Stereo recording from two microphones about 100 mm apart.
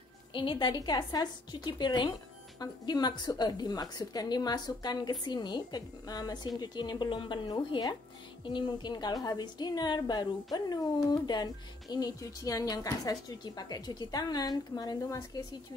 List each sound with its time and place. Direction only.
0.3 s a woman's voice: 55° left (ahead or behind)
15.0 s speech: 30° left (ahead or behind)